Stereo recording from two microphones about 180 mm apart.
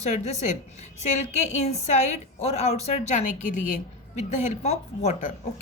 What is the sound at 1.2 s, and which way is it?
A woman's voice, 40° left (ahead or behind).